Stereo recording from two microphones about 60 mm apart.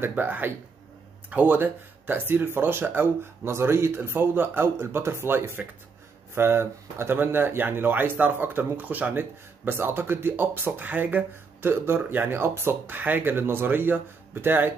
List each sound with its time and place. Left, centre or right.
0.1 s speech: right
9.7 s speech: right